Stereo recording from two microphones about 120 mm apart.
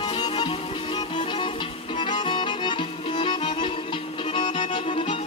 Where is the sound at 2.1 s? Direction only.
40° left (ahead or behind).